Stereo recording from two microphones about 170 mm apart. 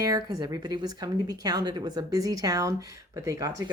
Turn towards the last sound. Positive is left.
turn(degrees=-20)  # may be behind; listen again after turning